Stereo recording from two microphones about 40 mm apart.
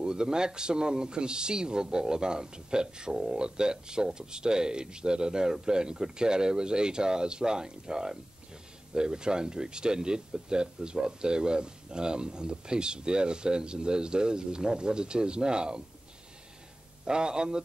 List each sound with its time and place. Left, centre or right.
0.0 s speech: centre
17.0 s speech: right